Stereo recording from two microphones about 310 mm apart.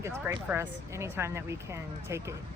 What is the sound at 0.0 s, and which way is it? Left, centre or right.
Speech, centre.